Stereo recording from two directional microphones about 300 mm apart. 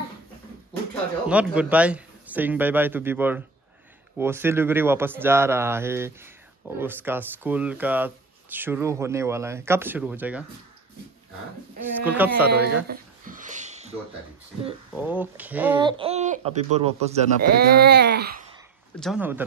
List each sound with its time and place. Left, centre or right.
1.2 s a man's voice: centre
12.0 s a man's voice: centre
12.4 s speech: right
12.8 s a sound: right
15.0 s speech: centre; by 17.5 s right
17.6 s speech: right
18.9 s a man's voice: centre